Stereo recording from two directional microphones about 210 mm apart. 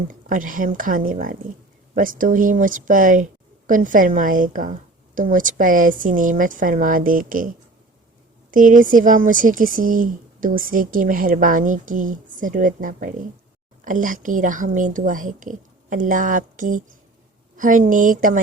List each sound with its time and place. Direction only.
0.1 s speech: 40° right (ahead or behind)